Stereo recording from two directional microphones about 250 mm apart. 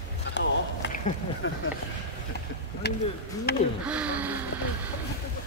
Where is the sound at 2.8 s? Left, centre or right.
Left.